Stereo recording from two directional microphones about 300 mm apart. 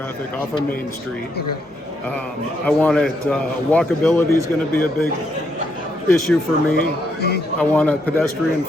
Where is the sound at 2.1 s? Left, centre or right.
Centre.